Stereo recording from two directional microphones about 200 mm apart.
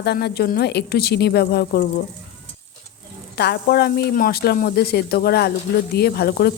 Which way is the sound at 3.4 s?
55° left (ahead or behind).